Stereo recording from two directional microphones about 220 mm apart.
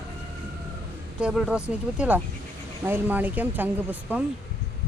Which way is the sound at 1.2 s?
5° right (ahead or behind).